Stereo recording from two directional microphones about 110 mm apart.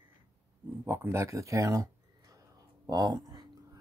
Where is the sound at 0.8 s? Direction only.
25° right (ahead or behind).